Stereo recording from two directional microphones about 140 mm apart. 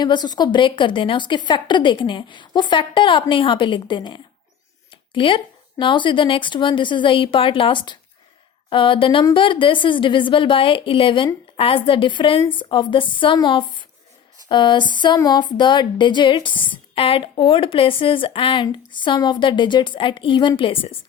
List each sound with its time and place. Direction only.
0.0 s music: 30° left (ahead or behind)